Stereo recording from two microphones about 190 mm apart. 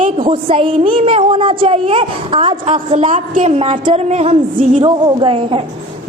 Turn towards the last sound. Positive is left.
turn(degrees=-30)  # may be behind; listen again after turning